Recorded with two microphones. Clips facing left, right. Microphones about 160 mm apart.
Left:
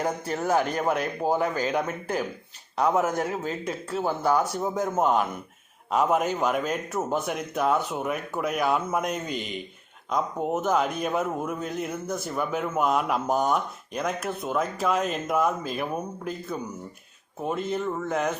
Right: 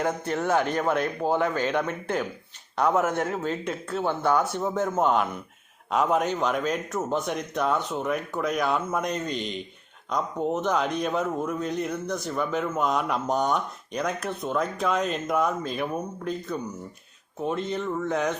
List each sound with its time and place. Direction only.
0.7 s speech: 10° left (ahead or behind)
1.4 s speech: 35° left (ahead or behind)
2.8 s speech: 10° left (ahead or behind)
3.2 s speech: 35° left (ahead or behind)
3.9 s a man's voice: 5° left (ahead or behind)